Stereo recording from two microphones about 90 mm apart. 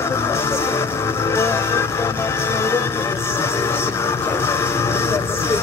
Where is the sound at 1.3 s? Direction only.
30° left (ahead or behind).